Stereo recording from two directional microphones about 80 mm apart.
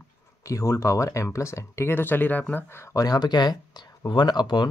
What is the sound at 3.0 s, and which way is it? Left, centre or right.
Speech, left.